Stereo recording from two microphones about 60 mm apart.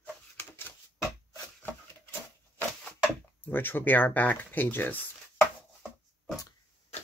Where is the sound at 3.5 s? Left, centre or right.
Left.